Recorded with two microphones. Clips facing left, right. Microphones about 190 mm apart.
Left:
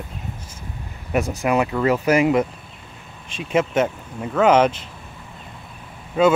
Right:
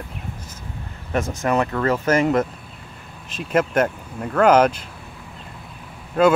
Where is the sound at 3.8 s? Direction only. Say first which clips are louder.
Even; 5° left (ahead or behind).